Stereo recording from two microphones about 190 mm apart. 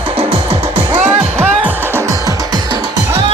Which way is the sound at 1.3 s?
10° right (ahead or behind).